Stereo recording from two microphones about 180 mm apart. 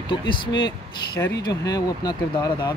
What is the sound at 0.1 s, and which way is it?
Speech, 25° left (ahead or behind).